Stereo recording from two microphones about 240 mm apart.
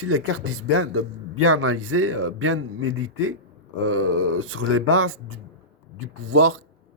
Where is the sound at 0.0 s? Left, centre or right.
Right.